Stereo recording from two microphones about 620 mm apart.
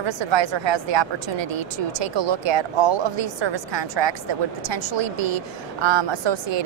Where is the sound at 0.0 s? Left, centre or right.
Right.